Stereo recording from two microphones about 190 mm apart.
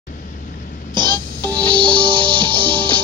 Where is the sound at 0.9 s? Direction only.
20° right (ahead or behind).